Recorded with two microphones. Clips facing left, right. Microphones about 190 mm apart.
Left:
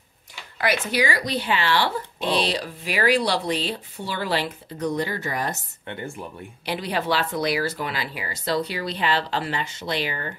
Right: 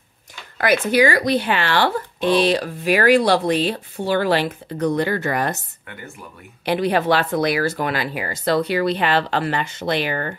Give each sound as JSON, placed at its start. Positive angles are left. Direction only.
{"t": 0.6, "sound": "speech", "side_deg": -50}
{"t": 5.9, "sound": "speech", "side_deg": 30}
{"t": 6.6, "sound": "speech", "side_deg": -55}